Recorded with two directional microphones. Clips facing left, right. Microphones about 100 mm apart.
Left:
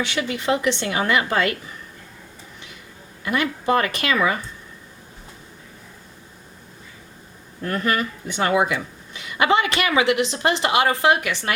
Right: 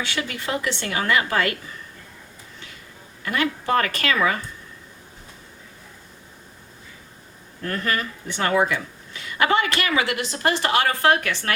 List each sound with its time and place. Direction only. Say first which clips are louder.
0.0 s speech: left 4 dB; 20° left (ahead or behind)
3.2 s speech: left 2 dB; 20° left (ahead or behind)
7.6 s speech: left 3 dB; 15° left (ahead or behind)